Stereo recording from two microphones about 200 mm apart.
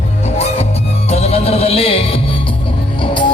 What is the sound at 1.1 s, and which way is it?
Music, 30° left (ahead or behind).